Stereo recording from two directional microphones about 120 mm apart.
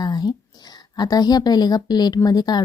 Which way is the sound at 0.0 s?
35° left (ahead or behind).